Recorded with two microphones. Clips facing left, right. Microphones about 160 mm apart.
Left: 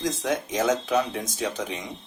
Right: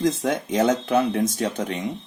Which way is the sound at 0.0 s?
60° right (ahead or behind).